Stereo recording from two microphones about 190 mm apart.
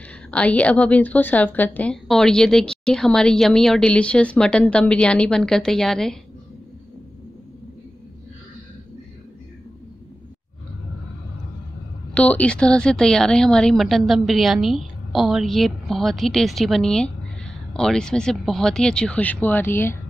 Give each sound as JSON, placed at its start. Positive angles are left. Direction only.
{"t": 0.3, "sound": "a woman's voice", "side_deg": 10}
{"t": 12.1, "sound": "a woman's voice", "side_deg": 5}